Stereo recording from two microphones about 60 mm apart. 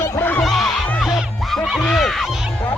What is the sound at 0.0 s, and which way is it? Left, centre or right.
Music, left.